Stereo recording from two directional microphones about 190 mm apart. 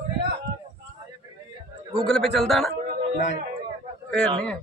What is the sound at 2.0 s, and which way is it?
Speech, centre (ahead or behind).